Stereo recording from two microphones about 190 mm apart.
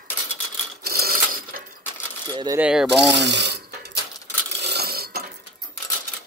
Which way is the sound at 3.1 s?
65° right (ahead or behind).